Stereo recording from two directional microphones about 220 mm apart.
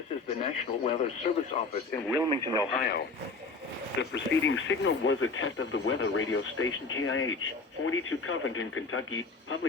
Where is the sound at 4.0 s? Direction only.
60° left (ahead or behind).